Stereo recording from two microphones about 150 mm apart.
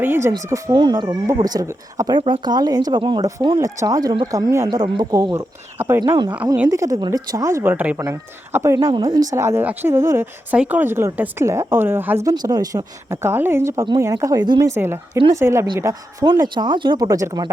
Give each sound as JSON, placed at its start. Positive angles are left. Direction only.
{"t": 0.0, "sound": "speech", "side_deg": -15}
{"t": 5.3, "sound": "a woman's voice", "side_deg": -15}
{"t": 12.3, "sound": "a woman's voice", "side_deg": -25}
{"t": 14.8, "sound": "a woman's voice", "side_deg": -15}